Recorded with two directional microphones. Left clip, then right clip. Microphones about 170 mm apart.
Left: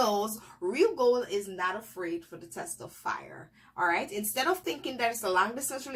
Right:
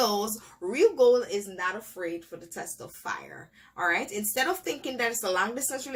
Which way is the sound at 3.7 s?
15° right (ahead or behind).